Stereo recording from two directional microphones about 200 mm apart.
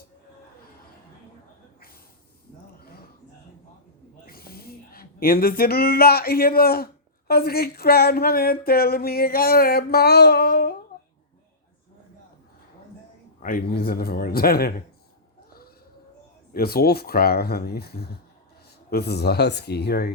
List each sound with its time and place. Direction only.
4.3 s speech: 50° left (ahead or behind)
13.4 s speech: 45° left (ahead or behind)
16.5 s speech: 50° left (ahead or behind)